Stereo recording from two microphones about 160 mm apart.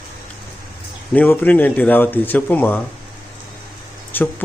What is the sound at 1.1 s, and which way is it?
Speech, 10° left (ahead or behind).